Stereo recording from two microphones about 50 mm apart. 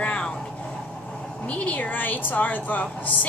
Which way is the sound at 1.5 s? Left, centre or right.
Left.